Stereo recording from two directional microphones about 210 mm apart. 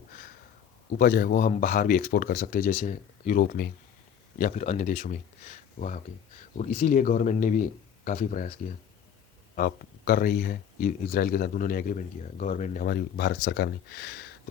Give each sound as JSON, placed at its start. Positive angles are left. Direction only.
{"t": 0.9, "sound": "speech", "side_deg": 45}
{"t": 9.6, "sound": "speech", "side_deg": 45}